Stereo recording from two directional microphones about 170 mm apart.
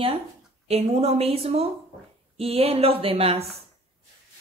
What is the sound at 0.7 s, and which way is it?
Speech, 40° right (ahead or behind).